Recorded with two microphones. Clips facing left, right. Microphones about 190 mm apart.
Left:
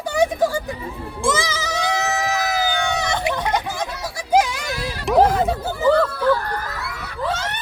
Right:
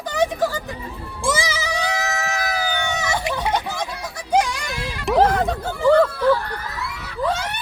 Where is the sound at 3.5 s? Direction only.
10° left (ahead or behind).